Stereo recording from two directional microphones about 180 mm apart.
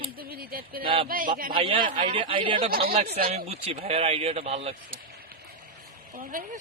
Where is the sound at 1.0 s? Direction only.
50° right (ahead or behind).